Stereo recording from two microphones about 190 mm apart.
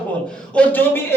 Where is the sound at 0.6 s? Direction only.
10° left (ahead or behind).